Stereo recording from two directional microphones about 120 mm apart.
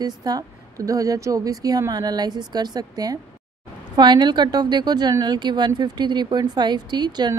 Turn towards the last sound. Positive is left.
turn(degrees=-35)  # may be behind; listen again after turning